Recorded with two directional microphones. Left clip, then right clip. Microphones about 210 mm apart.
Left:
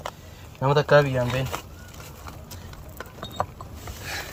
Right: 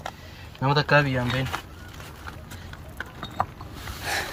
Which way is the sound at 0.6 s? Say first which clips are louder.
Left 2 dB; 40° left (ahead or behind).